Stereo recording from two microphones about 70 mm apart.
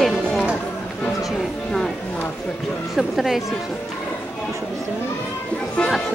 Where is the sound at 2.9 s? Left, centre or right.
Centre.